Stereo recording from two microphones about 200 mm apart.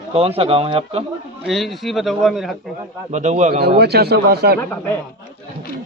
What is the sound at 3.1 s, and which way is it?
Speech, 35° right (ahead or behind).